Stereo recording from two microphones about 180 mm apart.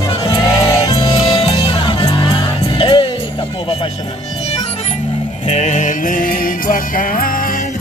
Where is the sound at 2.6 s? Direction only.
30° left (ahead or behind).